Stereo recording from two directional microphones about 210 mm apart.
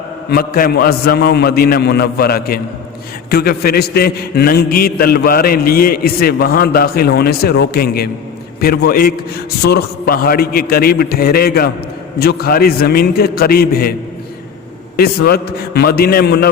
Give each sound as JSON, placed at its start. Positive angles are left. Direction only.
{"t": 0.3, "sound": "a man's voice", "side_deg": 45}
{"t": 14.9, "sound": "a man's voice", "side_deg": 45}